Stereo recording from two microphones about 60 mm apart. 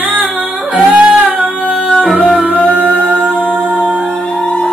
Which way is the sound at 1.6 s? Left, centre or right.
Centre.